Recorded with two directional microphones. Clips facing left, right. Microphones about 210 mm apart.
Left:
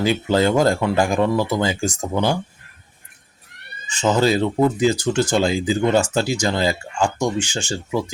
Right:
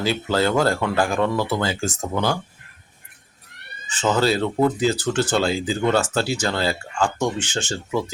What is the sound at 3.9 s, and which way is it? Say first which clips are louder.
Speech: left 2 dB; 15° left (ahead or behind).